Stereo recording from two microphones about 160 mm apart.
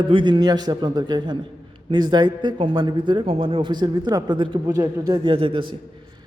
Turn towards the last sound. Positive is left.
turn(degrees=-35)  # may be behind; listen again after turning